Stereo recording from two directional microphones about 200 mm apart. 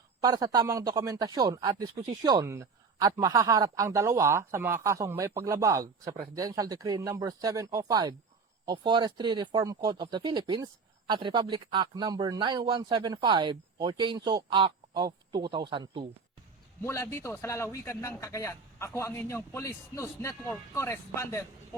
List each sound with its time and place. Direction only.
0.2 s speech: 20° right (ahead or behind)
16.8 s a man's voice: 15° left (ahead or behind)